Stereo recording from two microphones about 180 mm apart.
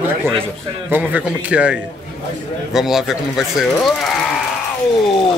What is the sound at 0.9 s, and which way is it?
A man's voice, 10° right (ahead or behind).